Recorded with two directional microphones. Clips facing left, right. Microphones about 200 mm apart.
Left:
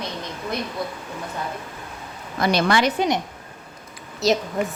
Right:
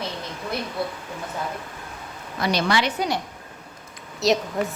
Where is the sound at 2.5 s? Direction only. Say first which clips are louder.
Left 3 dB; 50° left (ahead or behind).